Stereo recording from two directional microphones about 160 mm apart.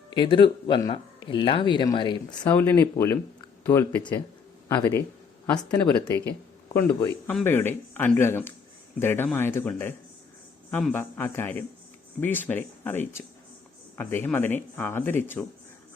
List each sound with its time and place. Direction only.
0.1 s speech: 30° left (ahead or behind)
2.5 s speech: 10° left (ahead or behind)
5.8 s speech: 15° left (ahead or behind)